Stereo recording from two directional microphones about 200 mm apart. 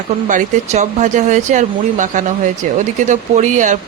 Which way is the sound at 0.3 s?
35° right (ahead or behind).